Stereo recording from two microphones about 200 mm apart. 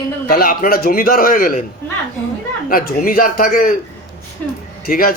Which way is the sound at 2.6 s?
45° left (ahead or behind).